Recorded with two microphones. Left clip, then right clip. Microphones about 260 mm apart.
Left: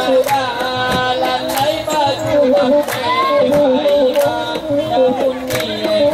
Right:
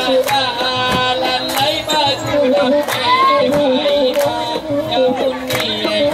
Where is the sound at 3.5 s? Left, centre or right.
Centre.